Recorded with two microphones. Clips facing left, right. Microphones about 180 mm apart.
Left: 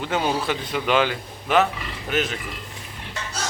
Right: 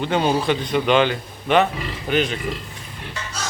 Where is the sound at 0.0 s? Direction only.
5° left (ahead or behind).